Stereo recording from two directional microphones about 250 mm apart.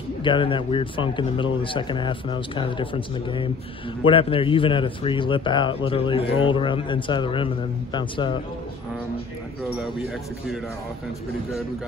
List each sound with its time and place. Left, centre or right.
0.2 s a man's voice: centre